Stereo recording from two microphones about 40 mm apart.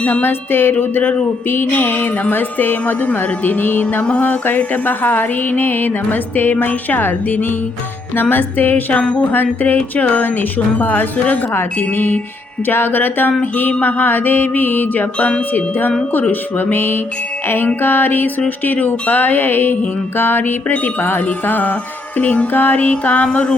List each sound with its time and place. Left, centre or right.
0.2 s music: left
8.1 s music: left
9.3 s music: left
11.5 s music: left
16.3 s music: left